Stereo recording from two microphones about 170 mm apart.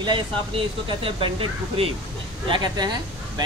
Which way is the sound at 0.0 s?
30° right (ahead or behind).